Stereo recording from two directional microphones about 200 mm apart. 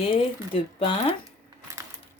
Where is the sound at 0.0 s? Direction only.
30° left (ahead or behind).